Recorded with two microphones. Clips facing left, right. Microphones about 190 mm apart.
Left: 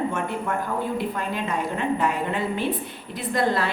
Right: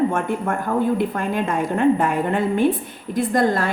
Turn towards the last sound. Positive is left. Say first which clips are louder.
# right 5 dB
turn(degrees=-45)  # may be behind; listen again after turning